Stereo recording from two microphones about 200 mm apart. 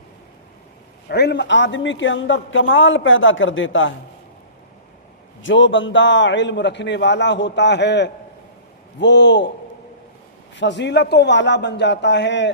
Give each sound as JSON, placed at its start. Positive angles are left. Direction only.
{"t": 1.0, "sound": "a man's voice", "side_deg": 55}
{"t": 5.4, "sound": "a man's voice", "side_deg": 70}
{"t": 10.5, "sound": "a man's voice", "side_deg": 60}